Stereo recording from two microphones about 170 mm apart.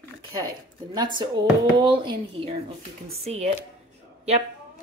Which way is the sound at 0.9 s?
25° right (ahead or behind).